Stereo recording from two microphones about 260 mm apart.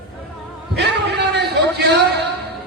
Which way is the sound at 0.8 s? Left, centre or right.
Right.